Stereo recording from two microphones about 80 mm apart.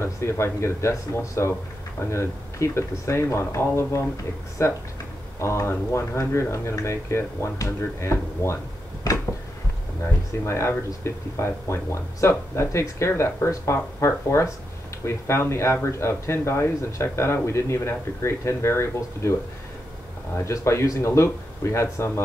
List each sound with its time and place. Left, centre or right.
0.0 s speech: left
10.4 s speech: left
20.3 s speech: left